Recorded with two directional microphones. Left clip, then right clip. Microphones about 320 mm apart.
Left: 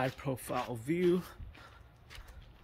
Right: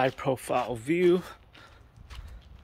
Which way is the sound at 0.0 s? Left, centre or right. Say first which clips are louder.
Right 9 dB; centre.